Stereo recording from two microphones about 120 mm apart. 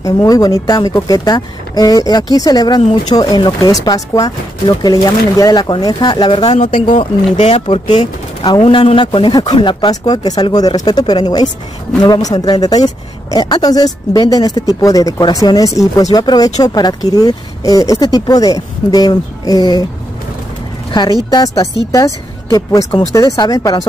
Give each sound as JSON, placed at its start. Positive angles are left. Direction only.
{"t": 0.0, "sound": "speech", "side_deg": 30}
{"t": 6.5, "sound": "speech", "side_deg": 75}
{"t": 7.8, "sound": "speech", "side_deg": 75}
{"t": 8.7, "sound": "speech", "side_deg": 45}
{"t": 21.3, "sound": "speech", "side_deg": 35}